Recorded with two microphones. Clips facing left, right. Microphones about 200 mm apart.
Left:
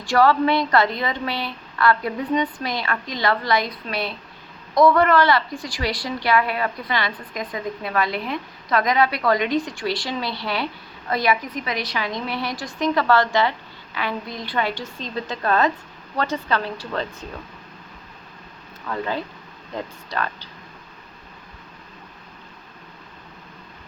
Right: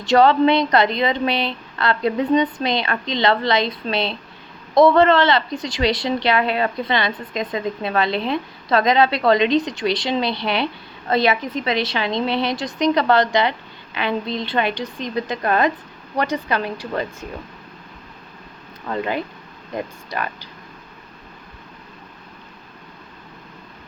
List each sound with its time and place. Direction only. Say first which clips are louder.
0.0 s a woman's voice: right 4 dB; 20° right (ahead or behind)
18.9 s speech: right 3 dB; 15° right (ahead or behind)